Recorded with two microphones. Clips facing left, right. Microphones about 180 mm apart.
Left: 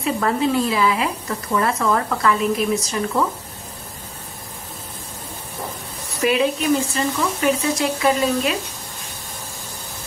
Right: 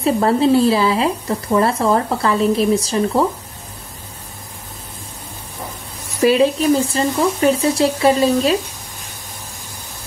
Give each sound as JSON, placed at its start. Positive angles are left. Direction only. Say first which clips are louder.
{"t": 0.0, "sound": "speech", "louder": "right 5 dB", "side_deg": -30}
{"t": 6.2, "sound": "speech", "louder": "right 5 dB", "side_deg": -35}